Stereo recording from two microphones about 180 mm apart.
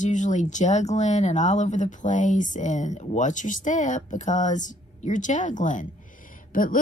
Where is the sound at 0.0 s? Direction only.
40° left (ahead or behind).